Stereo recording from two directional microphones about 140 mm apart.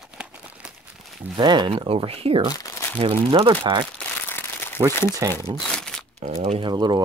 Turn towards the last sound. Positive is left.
turn(degrees=-30)  # may be behind; listen again after turning